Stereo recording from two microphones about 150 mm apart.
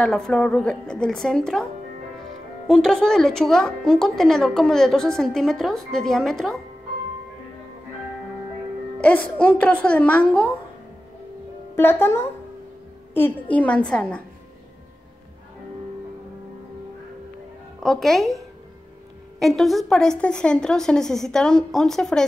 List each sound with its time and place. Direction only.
0.0 s a woman's voice: 5° left (ahead or behind)
2.7 s a woman's voice: 5° left (ahead or behind)
9.0 s a woman's voice: 10° left (ahead or behind)
11.7 s a woman's voice: 15° left (ahead or behind)
17.8 s a woman's voice: centre (ahead or behind)
19.4 s a woman's voice: centre (ahead or behind)